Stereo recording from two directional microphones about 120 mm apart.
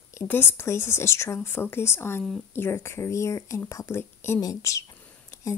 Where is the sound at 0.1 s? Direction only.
20° left (ahead or behind).